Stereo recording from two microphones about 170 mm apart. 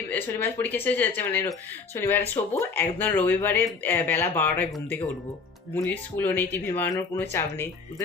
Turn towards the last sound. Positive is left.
turn(degrees=15)  # may be behind; listen again after turning